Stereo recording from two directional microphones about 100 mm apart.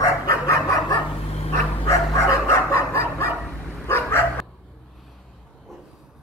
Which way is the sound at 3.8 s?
20° left (ahead or behind).